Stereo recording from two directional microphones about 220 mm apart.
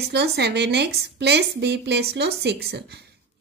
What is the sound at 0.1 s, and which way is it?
A woman's voice, 50° right (ahead or behind).